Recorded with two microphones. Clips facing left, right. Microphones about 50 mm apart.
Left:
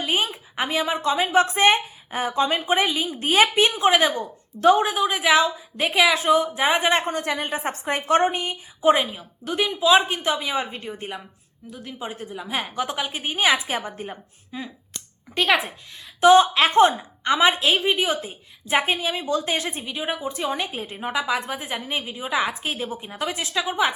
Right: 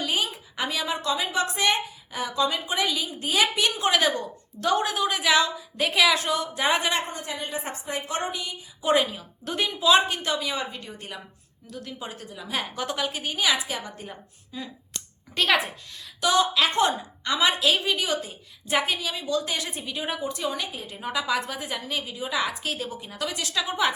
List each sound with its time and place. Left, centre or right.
0.0 s a sound: left
1.1 s a woman's voice: left
3.8 s a woman's voice: left
6.9 s a woman's voice: left
8.8 s a woman's voice: centre
9.4 s a woman's voice: centre; by 13.4 s left
13.4 s a woman's voice: left
15.4 s a woman's voice: centre
16.2 s a woman's voice: left
19.8 s a woman's voice: centre
21.1 s a woman's voice: centre
23.6 s a woman's voice: centre